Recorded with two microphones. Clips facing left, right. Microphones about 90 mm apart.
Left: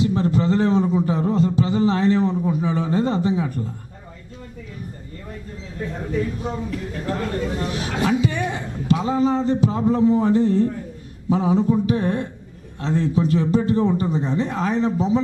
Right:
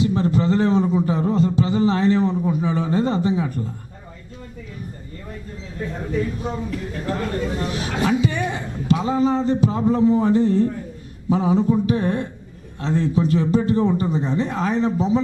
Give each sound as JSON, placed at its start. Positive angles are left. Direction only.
{"t": 0.0, "sound": "a man's voice", "side_deg": -15}
{"t": 5.8, "sound": "a man's voice", "side_deg": -15}